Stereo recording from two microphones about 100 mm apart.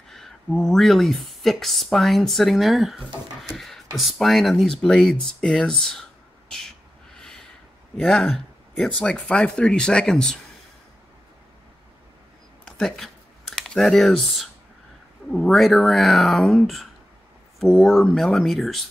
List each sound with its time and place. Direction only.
0.1 s speech: 5° left (ahead or behind)
7.2 s a sound: 5° left (ahead or behind)
8.0 s speech: centre (ahead or behind)
12.6 s computer keyboard: 5° left (ahead or behind)
15.3 s speech: 5° left (ahead or behind)